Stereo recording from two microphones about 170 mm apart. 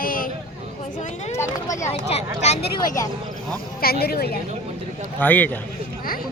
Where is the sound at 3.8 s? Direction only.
65° left (ahead or behind).